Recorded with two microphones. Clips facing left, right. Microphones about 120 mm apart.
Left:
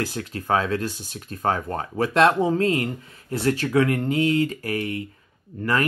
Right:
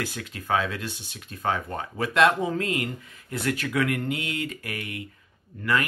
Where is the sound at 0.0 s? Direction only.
40° left (ahead or behind).